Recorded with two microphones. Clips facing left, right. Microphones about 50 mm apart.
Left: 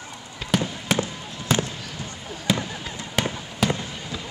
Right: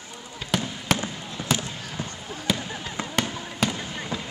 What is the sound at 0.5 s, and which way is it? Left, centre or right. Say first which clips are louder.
Fireworks: left 3 dB; centre.